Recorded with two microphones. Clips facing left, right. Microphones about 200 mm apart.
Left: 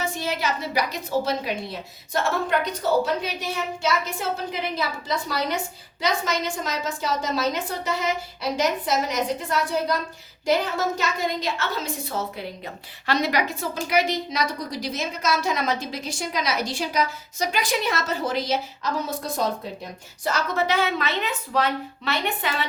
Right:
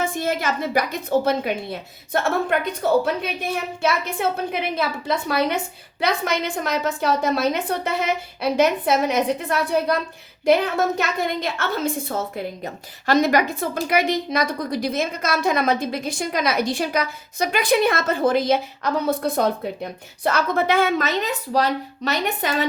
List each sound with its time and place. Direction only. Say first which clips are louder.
0.0 s a woman's voice: right 4 dB; 50° right (ahead or behind)